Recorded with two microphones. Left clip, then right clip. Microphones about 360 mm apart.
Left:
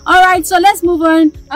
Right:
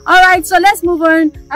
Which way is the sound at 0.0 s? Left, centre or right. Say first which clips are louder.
Right 1 dB; centre.